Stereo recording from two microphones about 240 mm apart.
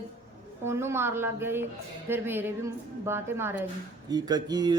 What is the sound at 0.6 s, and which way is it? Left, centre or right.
A woman's voice, centre.